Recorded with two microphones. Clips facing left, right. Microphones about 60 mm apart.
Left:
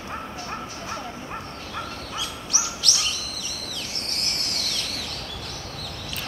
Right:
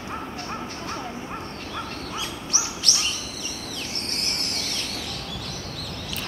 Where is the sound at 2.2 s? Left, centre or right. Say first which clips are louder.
Left 2 dB; right.